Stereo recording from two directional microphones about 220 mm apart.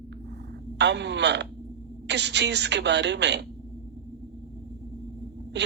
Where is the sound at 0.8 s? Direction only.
50° right (ahead or behind).